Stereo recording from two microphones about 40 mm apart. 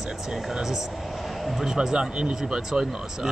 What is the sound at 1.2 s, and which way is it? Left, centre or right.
Vehicle, centre.